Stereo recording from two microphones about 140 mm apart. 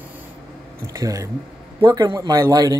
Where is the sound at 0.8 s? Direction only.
25° right (ahead or behind).